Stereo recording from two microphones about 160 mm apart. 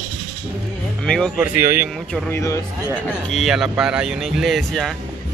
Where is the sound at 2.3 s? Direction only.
20° left (ahead or behind).